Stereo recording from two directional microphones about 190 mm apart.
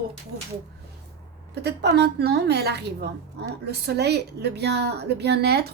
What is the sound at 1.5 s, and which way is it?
A woman's voice, 60° right (ahead or behind).